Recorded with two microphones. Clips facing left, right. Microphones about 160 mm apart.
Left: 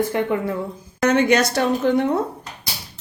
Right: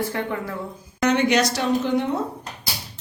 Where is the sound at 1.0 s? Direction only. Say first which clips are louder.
Left 2 dB; 50° left (ahead or behind).